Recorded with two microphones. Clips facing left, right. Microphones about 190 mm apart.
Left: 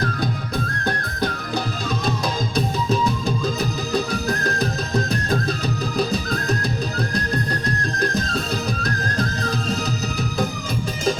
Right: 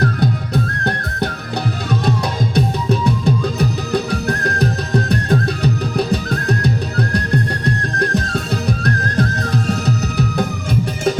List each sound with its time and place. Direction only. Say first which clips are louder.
0.2 s music: right 6 dB; 65° right (ahead or behind)
2.6 s music: right 3 dB; 65° right (ahead or behind)